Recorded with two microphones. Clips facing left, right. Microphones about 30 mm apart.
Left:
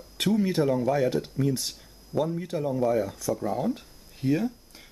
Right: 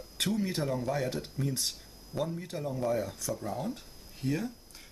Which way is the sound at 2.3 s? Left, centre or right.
Centre.